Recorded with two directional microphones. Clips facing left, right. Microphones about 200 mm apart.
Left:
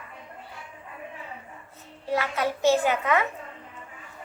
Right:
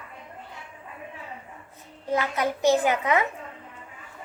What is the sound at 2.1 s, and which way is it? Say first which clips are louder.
A child's voice: right 1 dB; 15° right (ahead or behind).